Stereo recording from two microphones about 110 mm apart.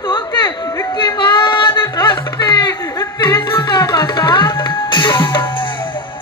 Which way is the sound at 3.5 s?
40° left (ahead or behind).